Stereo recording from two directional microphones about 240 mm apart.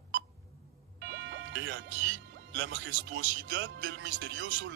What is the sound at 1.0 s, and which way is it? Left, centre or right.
Speech, right.